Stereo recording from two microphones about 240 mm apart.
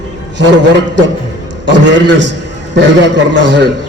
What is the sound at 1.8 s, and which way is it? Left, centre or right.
Speech, right.